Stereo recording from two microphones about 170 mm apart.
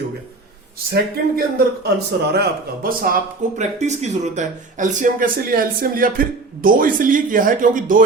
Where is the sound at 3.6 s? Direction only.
45° right (ahead or behind).